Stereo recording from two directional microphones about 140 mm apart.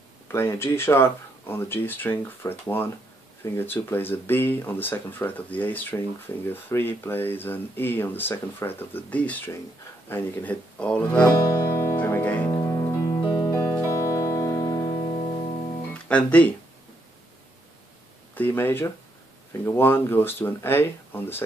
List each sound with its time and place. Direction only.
0.3 s speech: 20° left (ahead or behind)
11.2 s music: 25° left (ahead or behind)
12.4 s music: 25° left (ahead or behind)
13.5 s music: 15° left (ahead or behind)
15.9 s speech: 10° left (ahead or behind)
18.3 s speech: 15° left (ahead or behind)